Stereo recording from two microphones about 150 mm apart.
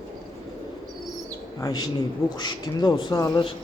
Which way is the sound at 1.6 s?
25° left (ahead or behind).